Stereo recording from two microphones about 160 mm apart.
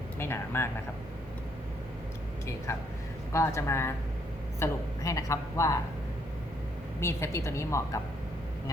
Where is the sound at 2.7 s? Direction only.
15° left (ahead or behind).